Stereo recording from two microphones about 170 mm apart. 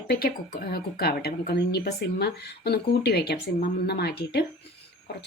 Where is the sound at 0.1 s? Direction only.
65° left (ahead or behind).